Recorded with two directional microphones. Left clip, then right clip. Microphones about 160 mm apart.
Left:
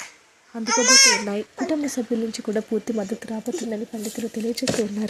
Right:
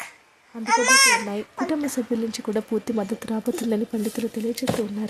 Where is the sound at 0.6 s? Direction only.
20° right (ahead or behind).